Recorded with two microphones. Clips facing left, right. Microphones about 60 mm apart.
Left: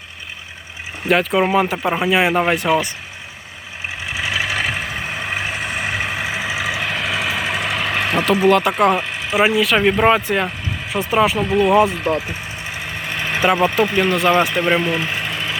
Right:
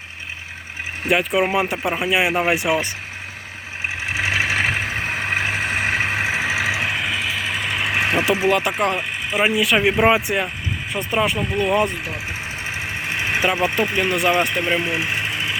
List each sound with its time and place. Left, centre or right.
1.0 s speech: centre
4.1 s vehicle: right
6.9 s vehicle: centre
7.9 s vehicle: centre
8.3 s speech: centre
12.6 s vehicle: right
13.4 s speech: centre
14.8 s engine: centre